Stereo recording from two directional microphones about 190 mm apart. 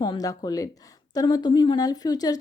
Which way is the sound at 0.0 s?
20° left (ahead or behind).